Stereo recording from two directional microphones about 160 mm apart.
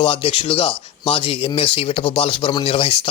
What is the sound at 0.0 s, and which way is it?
Speech, 35° left (ahead or behind).